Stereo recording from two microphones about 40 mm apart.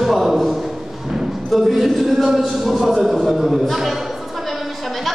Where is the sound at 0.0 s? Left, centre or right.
Centre.